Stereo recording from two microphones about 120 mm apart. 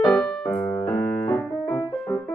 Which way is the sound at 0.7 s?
20° left (ahead or behind).